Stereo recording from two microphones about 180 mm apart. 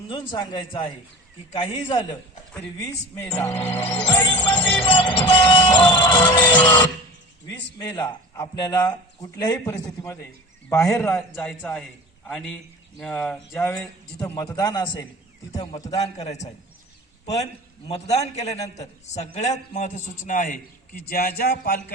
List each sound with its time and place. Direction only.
0.1 s speech: 25° left (ahead or behind)
2.5 s speech: 5° left (ahead or behind)
2.8 s speech: 20° left (ahead or behind)
7.8 s a man's voice: 20° left (ahead or behind); by 21.8 s 60° left (ahead or behind)